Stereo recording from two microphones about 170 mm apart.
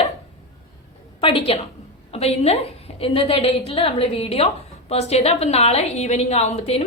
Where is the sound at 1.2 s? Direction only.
35° left (ahead or behind).